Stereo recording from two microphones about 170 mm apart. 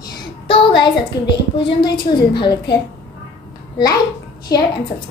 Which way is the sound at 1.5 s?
25° left (ahead or behind).